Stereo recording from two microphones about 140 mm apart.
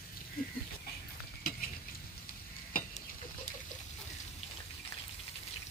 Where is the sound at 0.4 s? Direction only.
90° left.